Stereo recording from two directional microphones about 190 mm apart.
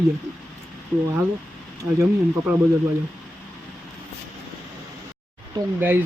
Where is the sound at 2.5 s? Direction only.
5° right (ahead or behind).